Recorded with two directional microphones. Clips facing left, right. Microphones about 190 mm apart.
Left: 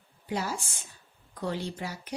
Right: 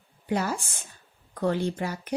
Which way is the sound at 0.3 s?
55° right (ahead or behind).